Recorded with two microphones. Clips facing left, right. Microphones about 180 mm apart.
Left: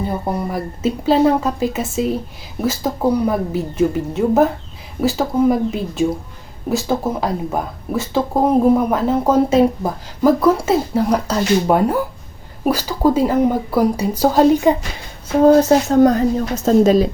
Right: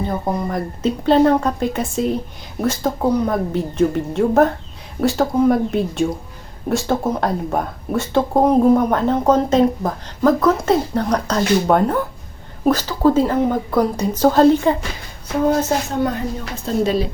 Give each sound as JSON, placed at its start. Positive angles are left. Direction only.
{"t": 0.1, "sound": "speech", "side_deg": 10}
{"t": 15.4, "sound": "speech", "side_deg": 35}